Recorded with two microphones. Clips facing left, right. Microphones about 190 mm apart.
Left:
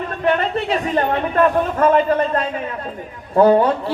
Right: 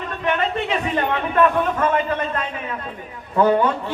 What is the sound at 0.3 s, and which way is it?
A man's voice, 35° left (ahead or behind).